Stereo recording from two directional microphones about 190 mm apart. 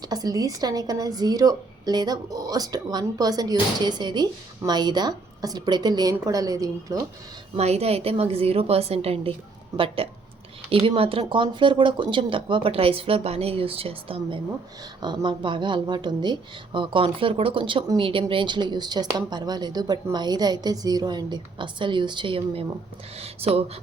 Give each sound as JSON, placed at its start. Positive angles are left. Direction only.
{"t": 0.0, "sound": "speech", "side_deg": -20}
{"t": 7.5, "sound": "a woman's voice", "side_deg": -35}